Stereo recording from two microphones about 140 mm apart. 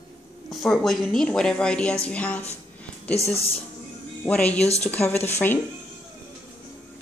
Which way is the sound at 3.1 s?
45° left (ahead or behind).